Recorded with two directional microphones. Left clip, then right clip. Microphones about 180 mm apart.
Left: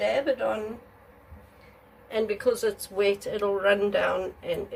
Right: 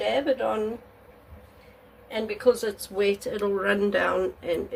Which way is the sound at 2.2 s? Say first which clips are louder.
Right 2 dB; 15° right (ahead or behind).